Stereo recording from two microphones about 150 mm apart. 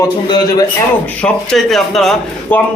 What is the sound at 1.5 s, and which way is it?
A man's voice, centre (ahead or behind).